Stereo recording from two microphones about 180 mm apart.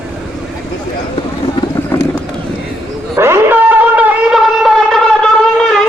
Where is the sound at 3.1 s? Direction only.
15° right (ahead or behind); by 5.3 s 5° left (ahead or behind).